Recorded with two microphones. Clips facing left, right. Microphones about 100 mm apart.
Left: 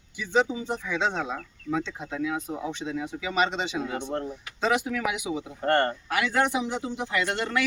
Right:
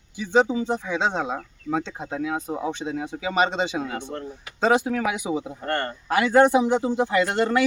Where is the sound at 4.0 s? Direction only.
25° left (ahead or behind).